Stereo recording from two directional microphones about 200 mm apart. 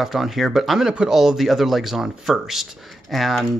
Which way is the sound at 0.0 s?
Centre (ahead or behind).